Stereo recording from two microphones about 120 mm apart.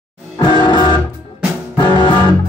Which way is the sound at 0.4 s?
40° left (ahead or behind).